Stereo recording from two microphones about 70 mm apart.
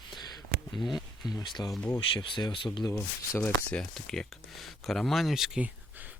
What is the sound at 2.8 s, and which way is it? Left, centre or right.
Speech, left.